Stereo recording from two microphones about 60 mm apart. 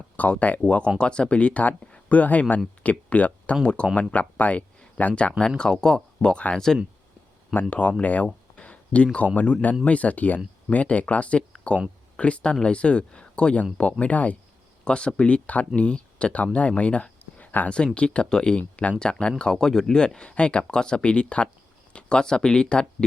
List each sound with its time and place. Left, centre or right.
0.2 s speech: left
5.5 s speech: centre
7.7 s speech: left
8.5 s a sound: left
9.1 s speech: left